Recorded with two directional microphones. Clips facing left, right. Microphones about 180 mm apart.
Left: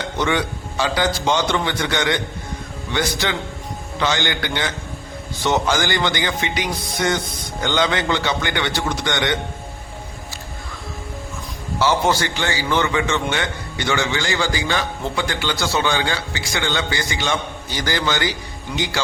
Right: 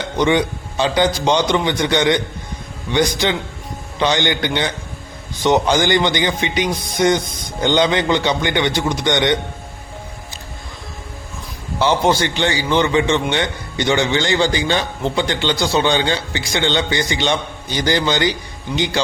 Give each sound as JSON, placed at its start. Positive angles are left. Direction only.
{"t": 0.2, "sound": "a man's voice", "side_deg": -20}
{"t": 11.8, "sound": "a man's voice", "side_deg": -20}